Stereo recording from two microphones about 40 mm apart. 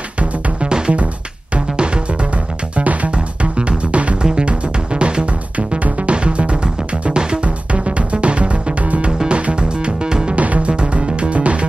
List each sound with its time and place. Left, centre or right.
0.2 s music: right
2.7 s music: right
7.4 s music: right
10.3 s music: right